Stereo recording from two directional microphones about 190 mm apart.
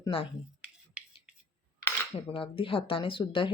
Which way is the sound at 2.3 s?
25° left (ahead or behind).